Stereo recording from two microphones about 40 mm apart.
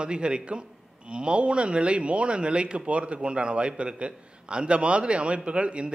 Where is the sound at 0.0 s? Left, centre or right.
Right.